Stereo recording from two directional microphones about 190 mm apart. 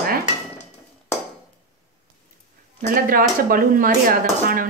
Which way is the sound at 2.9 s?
50° right (ahead or behind).